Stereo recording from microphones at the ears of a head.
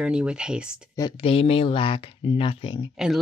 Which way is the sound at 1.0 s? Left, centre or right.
Left.